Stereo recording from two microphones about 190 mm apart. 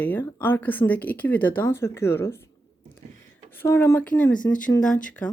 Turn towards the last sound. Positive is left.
turn(degrees=5)  # may be behind; listen again after turning